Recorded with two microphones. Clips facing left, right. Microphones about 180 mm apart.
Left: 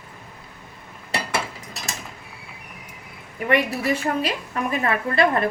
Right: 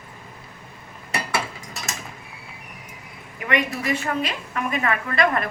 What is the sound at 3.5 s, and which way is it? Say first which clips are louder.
A woman's voice: left 3 dB; 35° left (ahead or behind).